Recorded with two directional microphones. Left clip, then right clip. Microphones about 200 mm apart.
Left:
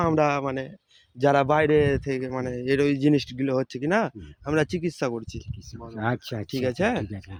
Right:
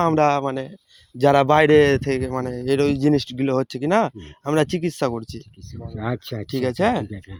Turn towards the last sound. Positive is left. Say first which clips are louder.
# right 4 dB
turn(degrees=-40)  # may be behind; listen again after turning